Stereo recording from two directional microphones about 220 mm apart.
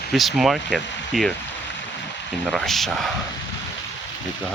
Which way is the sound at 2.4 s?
Centre (ahead or behind).